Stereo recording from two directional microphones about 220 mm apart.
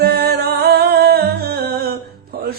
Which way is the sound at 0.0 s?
45° right (ahead or behind).